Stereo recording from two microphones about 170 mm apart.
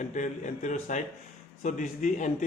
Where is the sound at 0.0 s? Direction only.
45° left (ahead or behind).